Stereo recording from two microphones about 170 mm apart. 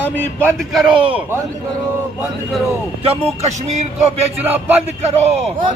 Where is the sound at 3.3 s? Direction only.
40° right (ahead or behind).